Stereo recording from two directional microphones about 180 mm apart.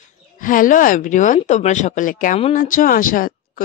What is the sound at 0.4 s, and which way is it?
Speech, 50° left (ahead or behind).